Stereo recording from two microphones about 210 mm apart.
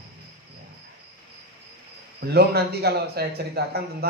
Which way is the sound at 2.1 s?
50° right (ahead or behind).